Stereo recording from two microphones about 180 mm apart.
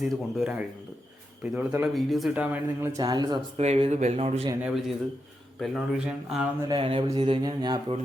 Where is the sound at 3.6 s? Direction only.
35° right (ahead or behind).